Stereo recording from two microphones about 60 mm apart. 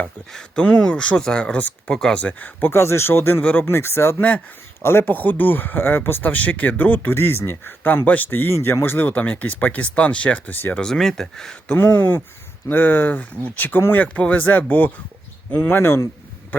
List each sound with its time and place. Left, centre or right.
0.3 s speech: centre
2.1 s speech: left
2.6 s speech: left
7.1 s speech: left
10.8 s speech: centre
11.8 s speech: left
14.1 s speech: left